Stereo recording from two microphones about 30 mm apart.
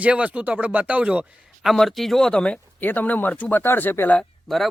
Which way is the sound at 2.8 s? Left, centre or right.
Left.